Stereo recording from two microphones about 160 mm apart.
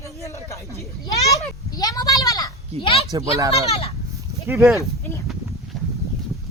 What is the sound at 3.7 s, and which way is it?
Speech, 35° left (ahead or behind).